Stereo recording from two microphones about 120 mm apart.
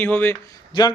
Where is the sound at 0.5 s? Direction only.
35° left (ahead or behind).